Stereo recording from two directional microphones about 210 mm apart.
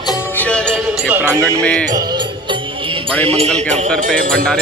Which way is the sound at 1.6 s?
5° left (ahead or behind).